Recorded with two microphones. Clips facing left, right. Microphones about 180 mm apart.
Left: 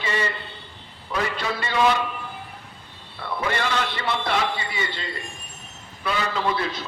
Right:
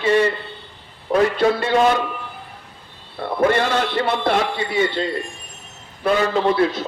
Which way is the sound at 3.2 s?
50° right (ahead or behind).